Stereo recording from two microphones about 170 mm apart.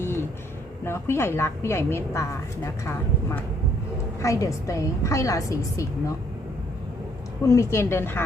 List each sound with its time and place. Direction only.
0.0 s a sound: 15° left (ahead or behind)
0.9 s a woman's voice: 15° left (ahead or behind)
4.2 s a woman's voice: 20° left (ahead or behind)
7.4 s a woman's voice: 15° left (ahead or behind)